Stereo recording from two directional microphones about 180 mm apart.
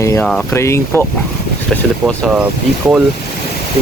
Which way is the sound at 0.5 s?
15° left (ahead or behind).